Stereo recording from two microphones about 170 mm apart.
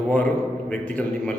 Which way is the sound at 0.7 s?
5° left (ahead or behind).